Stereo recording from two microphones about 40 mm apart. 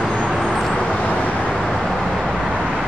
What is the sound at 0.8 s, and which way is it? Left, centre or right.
Vehicle, left.